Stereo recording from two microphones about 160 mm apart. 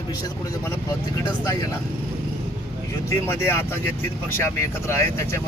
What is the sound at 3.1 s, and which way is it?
Speech, 15° left (ahead or behind).